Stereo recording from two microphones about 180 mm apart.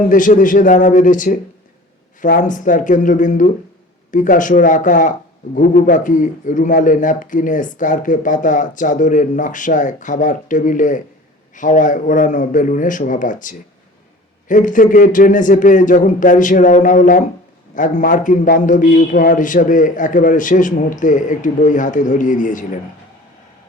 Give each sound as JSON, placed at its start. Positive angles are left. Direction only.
{"t": 0.1, "sound": "speech", "side_deg": 45}